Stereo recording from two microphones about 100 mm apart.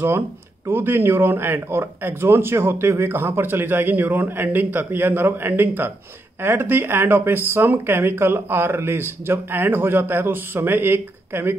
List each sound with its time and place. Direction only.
0.7 s speech: 20° right (ahead or behind)